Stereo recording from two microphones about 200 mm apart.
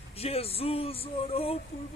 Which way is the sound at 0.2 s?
30° left (ahead or behind).